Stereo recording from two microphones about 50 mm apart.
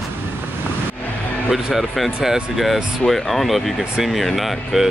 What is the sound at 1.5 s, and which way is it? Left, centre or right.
Speech, centre.